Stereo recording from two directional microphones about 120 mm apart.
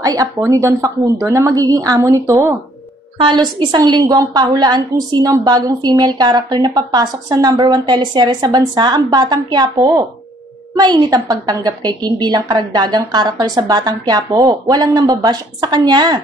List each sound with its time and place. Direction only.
0.0 s speech: 30° right (ahead or behind)
3.2 s a woman's voice: 45° right (ahead or behind)